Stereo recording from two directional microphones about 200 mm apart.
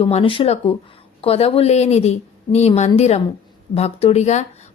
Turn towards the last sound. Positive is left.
turn(degrees=35)  # may be behind; listen again after turning